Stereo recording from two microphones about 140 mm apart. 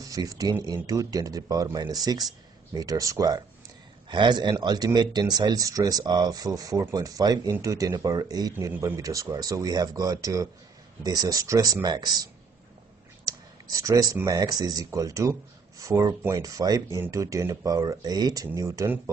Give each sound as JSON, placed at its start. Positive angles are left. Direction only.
{"t": 0.0, "sound": "speech", "side_deg": -25}